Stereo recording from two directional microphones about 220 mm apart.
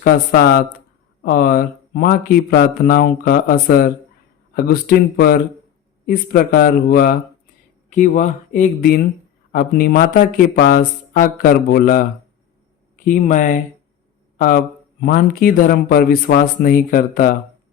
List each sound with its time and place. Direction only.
0.0 s speech: 50° left (ahead or behind)
13.1 s a man's voice: 35° left (ahead or behind)